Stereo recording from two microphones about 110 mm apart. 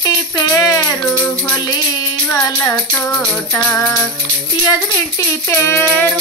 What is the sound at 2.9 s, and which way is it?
Music, 15° left (ahead or behind).